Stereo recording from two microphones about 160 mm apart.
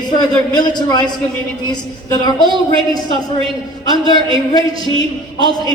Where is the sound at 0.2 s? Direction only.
25° left (ahead or behind).